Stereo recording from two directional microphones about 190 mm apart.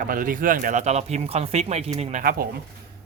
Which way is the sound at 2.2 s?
50° right (ahead or behind).